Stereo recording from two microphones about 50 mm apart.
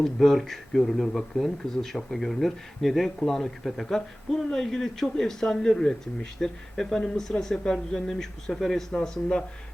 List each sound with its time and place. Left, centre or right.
0.0 s speech: centre
8.9 s speech: centre